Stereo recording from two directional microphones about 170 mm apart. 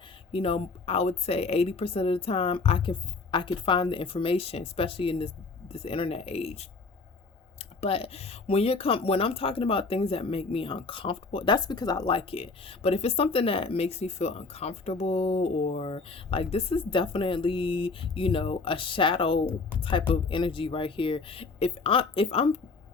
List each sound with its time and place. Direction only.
0.3 s speech: 35° left (ahead or behind)